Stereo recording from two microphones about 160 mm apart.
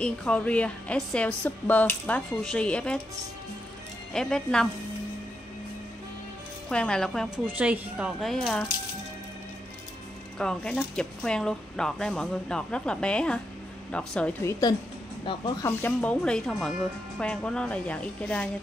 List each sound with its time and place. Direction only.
0.0 s a woman's voice: 5° left (ahead or behind)
4.1 s speech: 5° left (ahead or behind)
6.7 s speech: 5° left (ahead or behind)
7.4 s speech: 10° right (ahead or behind)
10.4 s a woman's voice: 5° left (ahead or behind)
14.4 s a woman's voice: 25° left (ahead or behind)
15.6 s a woman's voice: 10° left (ahead or behind)